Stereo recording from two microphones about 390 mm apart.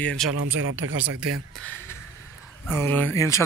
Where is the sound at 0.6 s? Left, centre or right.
Right.